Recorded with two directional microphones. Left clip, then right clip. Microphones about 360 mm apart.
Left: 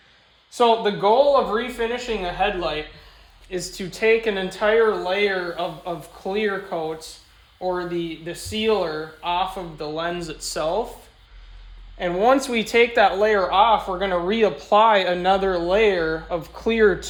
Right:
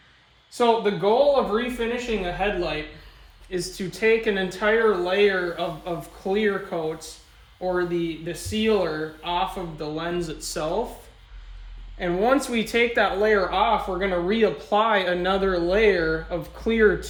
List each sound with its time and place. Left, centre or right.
0.5 s speech: centre
11.9 s speech: centre